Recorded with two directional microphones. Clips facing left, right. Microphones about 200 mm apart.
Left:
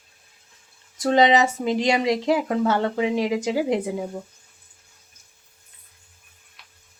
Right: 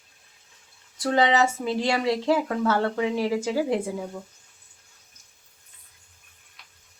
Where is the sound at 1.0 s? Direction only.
20° left (ahead or behind).